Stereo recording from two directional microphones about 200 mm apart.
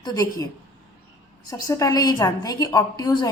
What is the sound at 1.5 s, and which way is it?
Speech, 15° left (ahead or behind).